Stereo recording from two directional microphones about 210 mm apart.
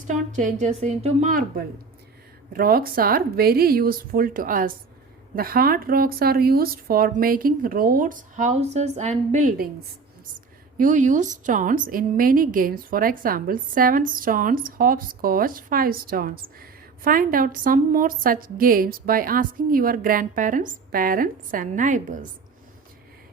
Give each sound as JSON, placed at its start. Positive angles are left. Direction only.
{"t": 0.1, "sound": "a woman's voice", "side_deg": -35}
{"t": 10.8, "sound": "a woman's voice", "side_deg": -40}